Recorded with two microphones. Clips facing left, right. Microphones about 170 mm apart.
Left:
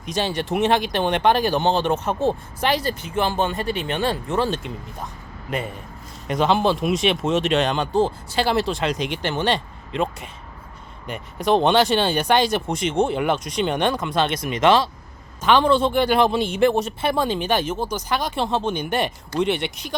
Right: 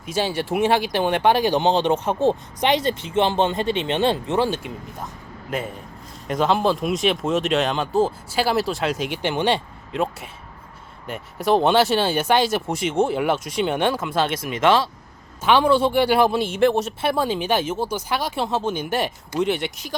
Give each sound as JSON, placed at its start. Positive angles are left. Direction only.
{"t": 0.0, "sound": "a man's voice", "side_deg": -10}